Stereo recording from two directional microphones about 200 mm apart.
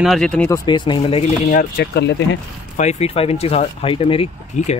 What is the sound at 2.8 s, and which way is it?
Speech, 35° left (ahead or behind).